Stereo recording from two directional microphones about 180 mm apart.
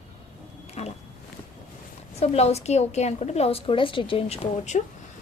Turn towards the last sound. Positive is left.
turn(degrees=40)  # may be behind; listen again after turning